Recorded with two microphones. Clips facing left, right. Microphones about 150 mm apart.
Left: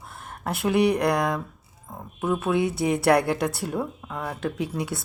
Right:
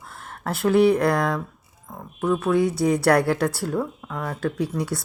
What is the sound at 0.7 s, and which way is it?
Speech, 15° left (ahead or behind).